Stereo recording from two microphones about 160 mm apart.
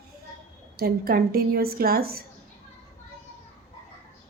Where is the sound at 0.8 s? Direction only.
70° right (ahead or behind).